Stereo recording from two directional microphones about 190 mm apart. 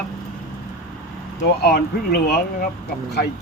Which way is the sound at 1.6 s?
60° left (ahead or behind).